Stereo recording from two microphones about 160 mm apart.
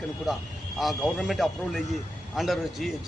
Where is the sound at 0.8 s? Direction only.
Centre (ahead or behind).